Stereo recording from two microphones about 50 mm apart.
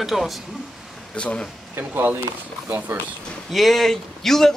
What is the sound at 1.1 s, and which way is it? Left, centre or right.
Speech, left.